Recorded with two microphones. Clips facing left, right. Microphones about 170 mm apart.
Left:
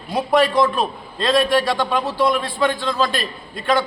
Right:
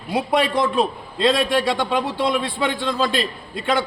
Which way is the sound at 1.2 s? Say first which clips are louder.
Left 1 dB; 25° right (ahead or behind).